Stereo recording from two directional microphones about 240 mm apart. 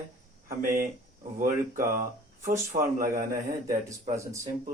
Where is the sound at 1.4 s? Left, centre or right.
Right.